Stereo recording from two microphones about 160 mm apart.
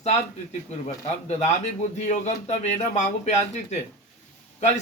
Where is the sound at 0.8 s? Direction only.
40° left (ahead or behind).